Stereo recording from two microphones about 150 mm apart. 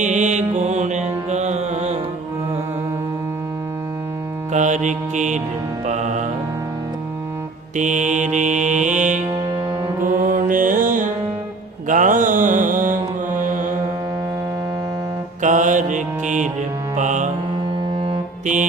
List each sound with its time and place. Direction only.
0.0 s music: 50° right (ahead or behind)
4.5 s mantra: 55° right (ahead or behind)
5.8 s music: 50° right (ahead or behind)
7.8 s mantra: 55° right (ahead or behind)
10.0 s music: 65° right (ahead or behind)
11.9 s mantra: 60° right (ahead or behind)
15.4 s mantra: 55° right (ahead or behind)